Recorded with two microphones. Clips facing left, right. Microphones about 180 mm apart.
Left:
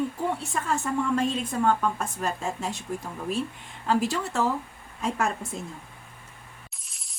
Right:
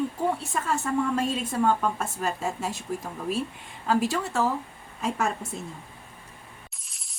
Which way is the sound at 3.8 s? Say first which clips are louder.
Even; centre (ahead or behind).